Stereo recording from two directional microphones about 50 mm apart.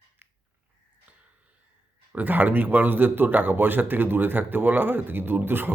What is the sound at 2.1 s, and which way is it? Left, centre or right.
Speech, right.